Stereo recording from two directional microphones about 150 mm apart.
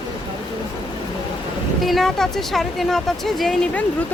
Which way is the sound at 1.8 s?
Centre (ahead or behind).